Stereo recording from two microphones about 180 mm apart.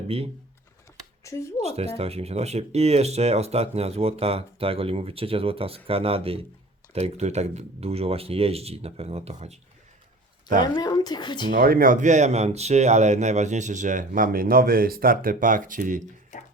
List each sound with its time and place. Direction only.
1.2 s speech: 15° left (ahead or behind)
1.6 s speech: 35° right (ahead or behind)
10.6 s speech: 25° left (ahead or behind)
11.5 s speech: 55° right (ahead or behind)
16.3 s music: 45° left (ahead or behind)